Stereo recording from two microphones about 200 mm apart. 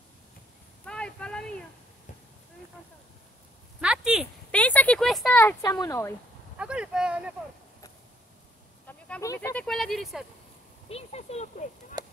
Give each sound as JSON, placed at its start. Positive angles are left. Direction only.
{"t": 0.8, "sound": "a sound", "side_deg": 5}
{"t": 3.8, "sound": "a sound", "side_deg": -5}
{"t": 5.4, "sound": "speech", "side_deg": 15}
{"t": 6.6, "sound": "speech", "side_deg": -5}
{"t": 8.8, "sound": "speech", "side_deg": 10}
{"t": 10.9, "sound": "speech", "side_deg": 30}
{"t": 12.0, "sound": "honk", "side_deg": -20}